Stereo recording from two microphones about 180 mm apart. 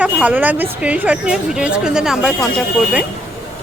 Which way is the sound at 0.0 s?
10° right (ahead or behind).